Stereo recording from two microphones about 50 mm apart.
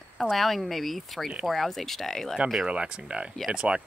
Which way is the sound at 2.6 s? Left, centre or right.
Centre.